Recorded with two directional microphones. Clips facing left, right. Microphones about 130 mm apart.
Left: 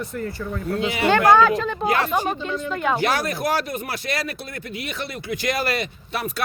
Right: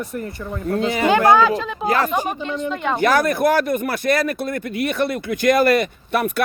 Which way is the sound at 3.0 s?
50° right (ahead or behind).